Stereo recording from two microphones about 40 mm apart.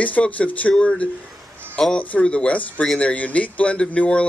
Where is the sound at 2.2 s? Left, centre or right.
Left.